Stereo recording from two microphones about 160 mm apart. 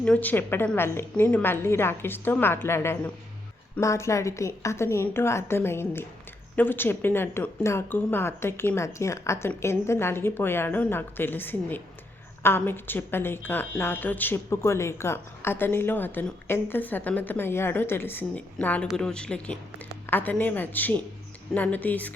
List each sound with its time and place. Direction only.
0.0 s a woman's voice: 10° left (ahead or behind)